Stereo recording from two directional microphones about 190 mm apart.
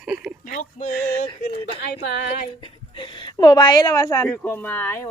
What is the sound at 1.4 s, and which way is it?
A woman's voice, 30° left (ahead or behind).